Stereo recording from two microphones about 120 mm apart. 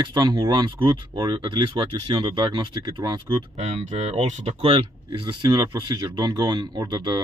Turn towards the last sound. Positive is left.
turn(degrees=-35)  # may be behind; listen again after turning